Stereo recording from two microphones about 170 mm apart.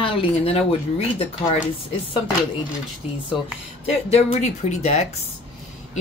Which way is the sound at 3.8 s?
40° left (ahead or behind).